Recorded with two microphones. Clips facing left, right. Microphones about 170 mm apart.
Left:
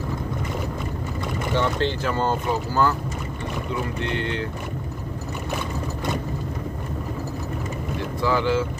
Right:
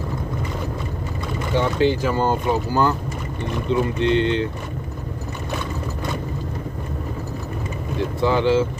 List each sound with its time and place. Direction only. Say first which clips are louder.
1.5 s speech: right 5 dB; 10° right (ahead or behind)
4.0 s speech: right 8 dB; 20° right (ahead or behind)
8.2 s speech: right 4 dB; 25° right (ahead or behind)